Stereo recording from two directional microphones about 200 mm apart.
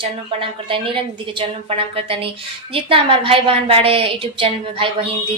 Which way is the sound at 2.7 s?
25° right (ahead or behind).